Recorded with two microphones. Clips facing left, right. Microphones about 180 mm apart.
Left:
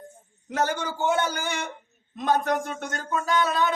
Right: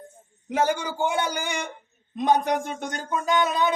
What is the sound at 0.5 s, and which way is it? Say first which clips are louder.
Speech: right 3 dB; 10° right (ahead or behind).